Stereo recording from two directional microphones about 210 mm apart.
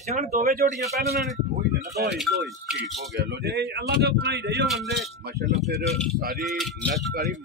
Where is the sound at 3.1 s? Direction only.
55° right (ahead or behind).